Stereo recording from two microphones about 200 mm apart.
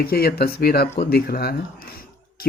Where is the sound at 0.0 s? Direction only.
50° left (ahead or behind).